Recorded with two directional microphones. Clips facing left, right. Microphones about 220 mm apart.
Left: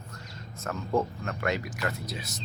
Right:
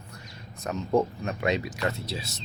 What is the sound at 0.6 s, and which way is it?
Speech, 15° right (ahead or behind).